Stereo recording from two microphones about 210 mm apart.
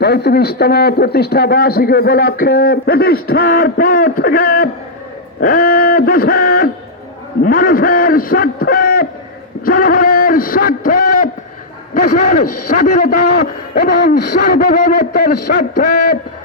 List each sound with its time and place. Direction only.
0.0 s a man's voice: 50° left (ahead or behind)